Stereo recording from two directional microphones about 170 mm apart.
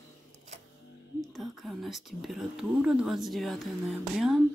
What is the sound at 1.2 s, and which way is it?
Speech, centre (ahead or behind).